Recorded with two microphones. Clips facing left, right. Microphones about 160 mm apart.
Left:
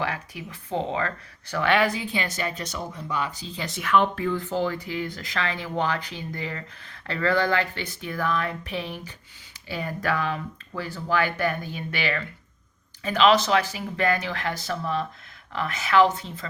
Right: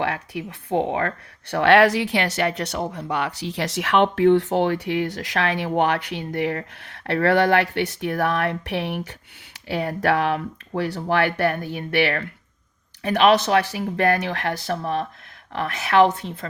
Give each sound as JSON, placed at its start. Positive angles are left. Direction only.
{"t": 0.0, "sound": "speech", "side_deg": -70}